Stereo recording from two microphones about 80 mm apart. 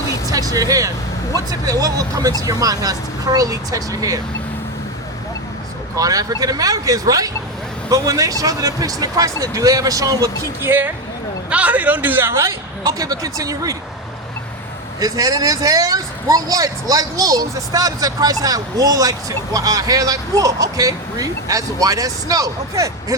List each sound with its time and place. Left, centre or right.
0.3 s speech: right
6.0 s speech: right
10.6 s a man's voice: right
12.8 s speech: right
15.0 s speech: right